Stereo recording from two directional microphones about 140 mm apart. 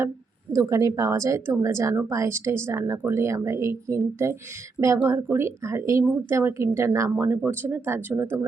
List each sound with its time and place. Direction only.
0.5 s a woman's voice: 25° right (ahead or behind)